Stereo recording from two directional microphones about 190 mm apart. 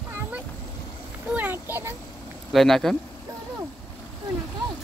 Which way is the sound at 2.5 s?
Centre (ahead or behind).